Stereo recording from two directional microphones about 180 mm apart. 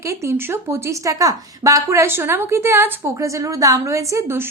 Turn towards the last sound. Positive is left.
turn(degrees=-15)  # may be behind; listen again after turning